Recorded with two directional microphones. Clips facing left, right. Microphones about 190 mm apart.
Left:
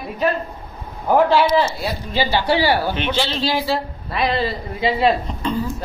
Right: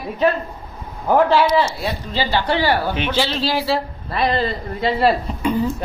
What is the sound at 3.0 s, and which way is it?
A man's voice, 5° right (ahead or behind).